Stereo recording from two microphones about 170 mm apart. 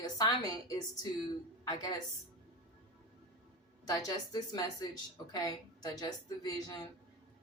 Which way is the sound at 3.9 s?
20° left (ahead or behind).